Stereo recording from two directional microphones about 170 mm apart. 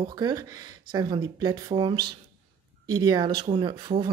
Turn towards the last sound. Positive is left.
turn(degrees=-25)  # may be behind; listen again after turning